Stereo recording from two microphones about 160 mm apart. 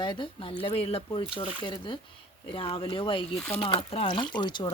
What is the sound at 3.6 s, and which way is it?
Speech, 35° left (ahead or behind).